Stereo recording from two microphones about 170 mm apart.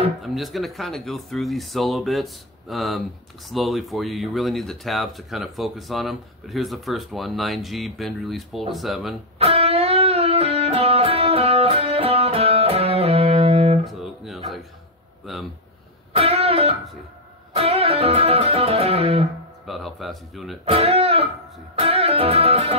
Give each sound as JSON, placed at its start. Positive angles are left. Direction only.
{"t": 0.2, "sound": "speech", "side_deg": 0}
{"t": 9.4, "sound": "music", "side_deg": -35}
{"t": 13.8, "sound": "guitar", "side_deg": 0}
{"t": 15.3, "sound": "speech", "side_deg": 0}
{"t": 16.2, "sound": "music", "side_deg": -35}
{"t": 19.6, "sound": "a sound", "side_deg": 0}
{"t": 20.6, "sound": "speech", "side_deg": -35}
{"t": 21.7, "sound": "music", "side_deg": -35}